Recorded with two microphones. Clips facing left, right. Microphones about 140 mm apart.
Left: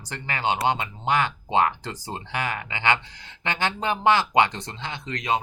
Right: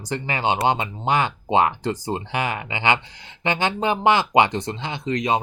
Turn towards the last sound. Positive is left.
turn(degrees=-20)  # may be behind; listen again after turning